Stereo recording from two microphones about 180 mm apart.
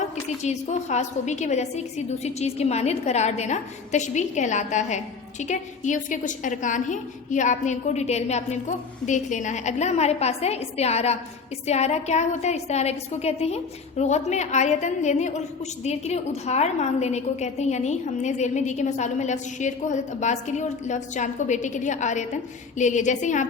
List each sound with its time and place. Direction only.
0.4 s a woman's voice: 40° left (ahead or behind)